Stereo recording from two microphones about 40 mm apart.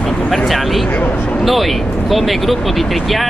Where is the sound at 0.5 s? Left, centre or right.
Centre.